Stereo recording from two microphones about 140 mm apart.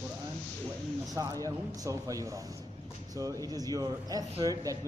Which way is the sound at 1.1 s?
25° right (ahead or behind).